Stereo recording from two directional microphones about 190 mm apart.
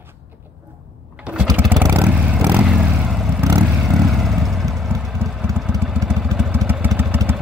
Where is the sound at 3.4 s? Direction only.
15° right (ahead or behind).